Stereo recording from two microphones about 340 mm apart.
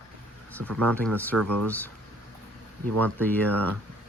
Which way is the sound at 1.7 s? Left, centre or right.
Centre.